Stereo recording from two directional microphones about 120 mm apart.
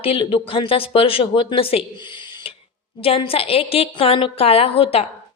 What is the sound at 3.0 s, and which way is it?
A woman's voice, 50° left (ahead or behind).